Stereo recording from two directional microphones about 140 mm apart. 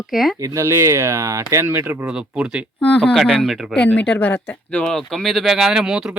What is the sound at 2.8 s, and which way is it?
Speech, 10° left (ahead or behind).